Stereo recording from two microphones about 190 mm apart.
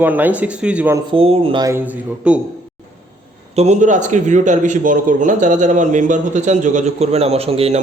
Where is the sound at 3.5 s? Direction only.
35° right (ahead or behind).